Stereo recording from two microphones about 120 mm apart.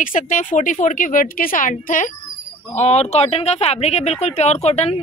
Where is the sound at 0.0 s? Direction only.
90° left.